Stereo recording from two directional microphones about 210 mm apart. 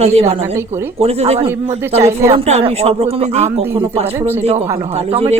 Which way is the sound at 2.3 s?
30° right (ahead or behind).